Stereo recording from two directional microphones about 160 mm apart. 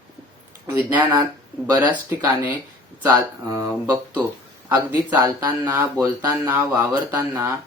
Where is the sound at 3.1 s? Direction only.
20° right (ahead or behind).